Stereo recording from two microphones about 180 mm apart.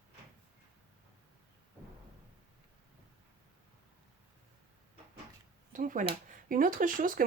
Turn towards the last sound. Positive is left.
turn(degrees=-50)  # may be behind; listen again after turning